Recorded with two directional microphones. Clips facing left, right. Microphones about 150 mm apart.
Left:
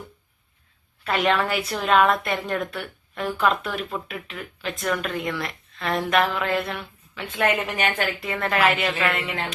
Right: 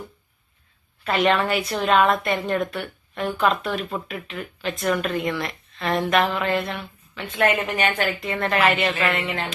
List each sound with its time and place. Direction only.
1.0 s speech: centre (ahead or behind)